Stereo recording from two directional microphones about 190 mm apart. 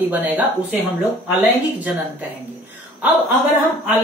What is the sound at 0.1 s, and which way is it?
Speech, 10° right (ahead or behind).